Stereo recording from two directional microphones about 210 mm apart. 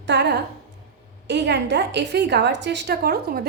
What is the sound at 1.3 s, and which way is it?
A woman's voice, 55° right (ahead or behind).